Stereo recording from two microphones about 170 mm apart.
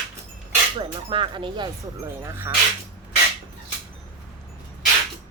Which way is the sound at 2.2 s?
15° right (ahead or behind).